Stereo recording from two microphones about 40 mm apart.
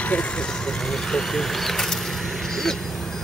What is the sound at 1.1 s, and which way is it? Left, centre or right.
Speech, centre.